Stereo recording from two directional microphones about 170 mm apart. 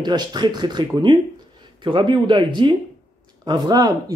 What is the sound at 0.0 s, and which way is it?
Speech, 25° right (ahead or behind).